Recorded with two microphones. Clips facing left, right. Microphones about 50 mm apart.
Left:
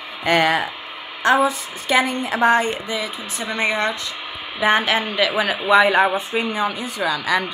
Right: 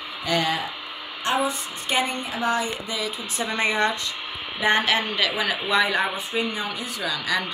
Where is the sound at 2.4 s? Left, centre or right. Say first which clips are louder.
Left 8 dB; left.